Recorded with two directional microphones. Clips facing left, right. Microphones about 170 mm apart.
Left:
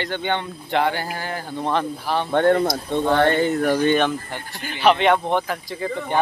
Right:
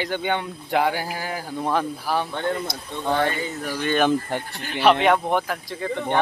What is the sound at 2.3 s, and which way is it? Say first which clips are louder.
Speech: left 9 dB; 60° left (ahead or behind).